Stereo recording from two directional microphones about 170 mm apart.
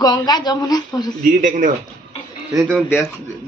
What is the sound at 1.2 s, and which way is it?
Speech, 50° right (ahead or behind).